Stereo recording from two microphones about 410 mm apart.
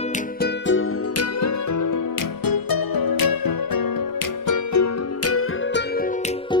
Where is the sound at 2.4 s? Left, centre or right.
Left.